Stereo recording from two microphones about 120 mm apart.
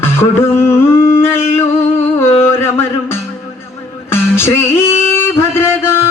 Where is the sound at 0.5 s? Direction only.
20° left (ahead or behind).